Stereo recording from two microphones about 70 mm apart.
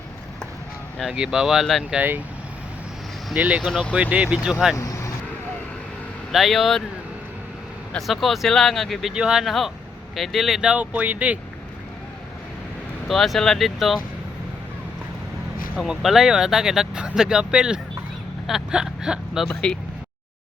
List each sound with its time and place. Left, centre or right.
1.1 s speech: centre
2.0 s speech: right
3.3 s speech: right
4.8 s vehicle: left
6.3 s speech: centre
7.9 s speech: centre
9.1 s speech: centre
10.6 s speech: centre
13.1 s speech: centre
15.9 s speech: centre
19.5 s speech: centre